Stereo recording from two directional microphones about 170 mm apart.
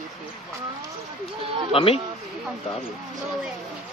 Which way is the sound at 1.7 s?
35° left (ahead or behind).